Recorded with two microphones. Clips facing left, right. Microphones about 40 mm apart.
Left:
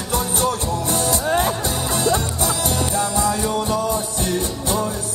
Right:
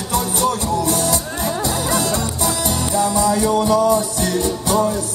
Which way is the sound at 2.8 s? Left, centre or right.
Left.